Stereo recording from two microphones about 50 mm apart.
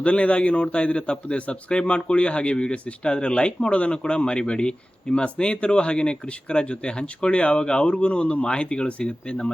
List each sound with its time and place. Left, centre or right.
0.0 s a man's voice: left